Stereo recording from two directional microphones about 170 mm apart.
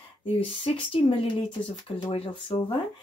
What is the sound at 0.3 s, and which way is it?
Speech, 30° left (ahead or behind).